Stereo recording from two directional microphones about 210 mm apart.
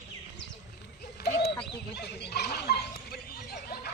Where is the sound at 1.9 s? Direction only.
55° left (ahead or behind).